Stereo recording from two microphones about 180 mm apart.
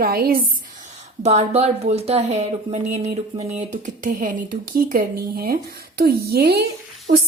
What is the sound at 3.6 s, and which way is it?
A woman's voice, 45° right (ahead or behind).